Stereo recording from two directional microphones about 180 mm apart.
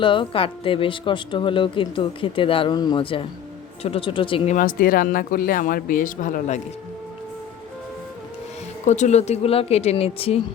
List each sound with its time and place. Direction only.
0.0 s speech: 25° left (ahead or behind)
4.5 s speech: 50° left (ahead or behind)
8.9 s speech: 40° left (ahead or behind)